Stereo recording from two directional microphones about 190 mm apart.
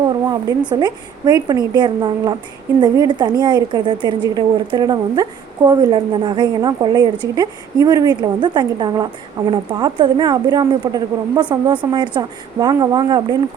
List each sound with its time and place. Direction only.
0.7 s a woman's voice: 20° right (ahead or behind)